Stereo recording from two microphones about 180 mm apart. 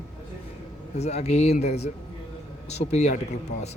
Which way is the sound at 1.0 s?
35° left (ahead or behind).